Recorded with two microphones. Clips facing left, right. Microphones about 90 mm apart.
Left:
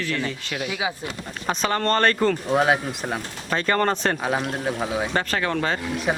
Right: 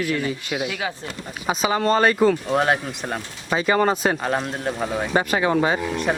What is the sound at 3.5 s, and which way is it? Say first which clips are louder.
A man's voice: right 3 dB; 10° right (ahead or behind).